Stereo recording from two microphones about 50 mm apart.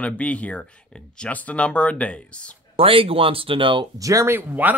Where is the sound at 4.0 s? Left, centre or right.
Right.